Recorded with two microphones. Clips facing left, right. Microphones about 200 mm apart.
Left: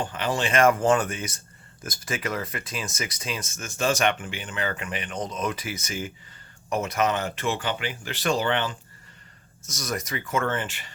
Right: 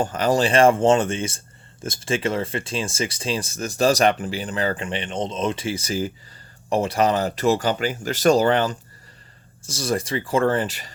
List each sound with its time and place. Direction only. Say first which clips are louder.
0.0 s speech: right 7 dB; 40° right (ahead or behind)
9.6 s speech: right 7 dB; 30° right (ahead or behind)